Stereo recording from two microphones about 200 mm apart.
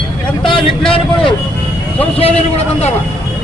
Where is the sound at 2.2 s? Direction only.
30° left (ahead or behind).